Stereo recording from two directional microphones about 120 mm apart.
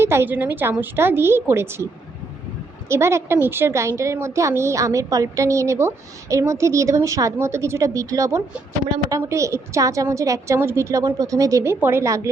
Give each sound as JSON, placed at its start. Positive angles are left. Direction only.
{"t": 0.0, "sound": "a woman's voice", "side_deg": -20}
{"t": 2.9, "sound": "a woman's voice", "side_deg": -20}